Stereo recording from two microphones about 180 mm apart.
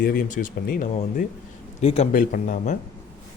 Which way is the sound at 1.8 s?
35° left (ahead or behind).